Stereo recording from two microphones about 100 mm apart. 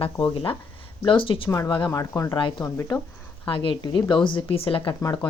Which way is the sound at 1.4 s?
30° left (ahead or behind).